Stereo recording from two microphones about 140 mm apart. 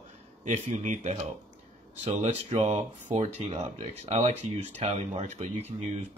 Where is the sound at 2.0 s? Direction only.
50° right (ahead or behind).